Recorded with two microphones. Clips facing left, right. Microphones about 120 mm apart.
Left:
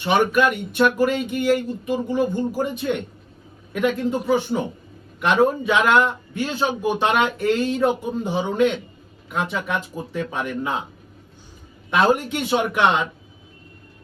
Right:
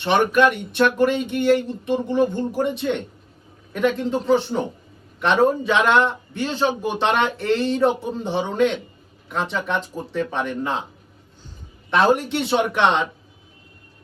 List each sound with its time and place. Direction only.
0.0 s a man's voice: 10° left (ahead or behind)
11.9 s a man's voice: 10° left (ahead or behind)